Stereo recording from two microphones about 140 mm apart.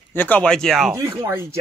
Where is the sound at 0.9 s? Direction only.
20° right (ahead or behind).